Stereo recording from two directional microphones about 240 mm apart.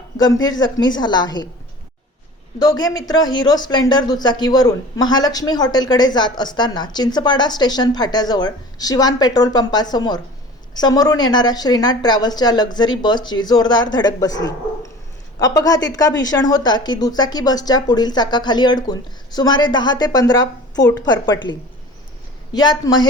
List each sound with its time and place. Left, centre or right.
0.4 s speech: centre
2.6 s speech: centre
22.5 s speech: centre